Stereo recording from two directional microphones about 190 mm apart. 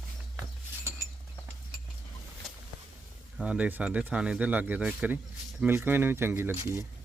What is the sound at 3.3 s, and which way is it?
Speech, 5° right (ahead or behind).